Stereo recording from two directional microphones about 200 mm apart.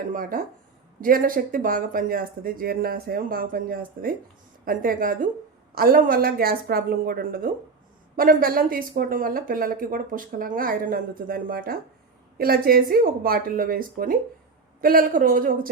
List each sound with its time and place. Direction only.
0.1 s speech: 45° right (ahead or behind)